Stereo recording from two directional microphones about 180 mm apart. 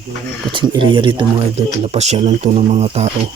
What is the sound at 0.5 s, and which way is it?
Speech, 25° right (ahead or behind).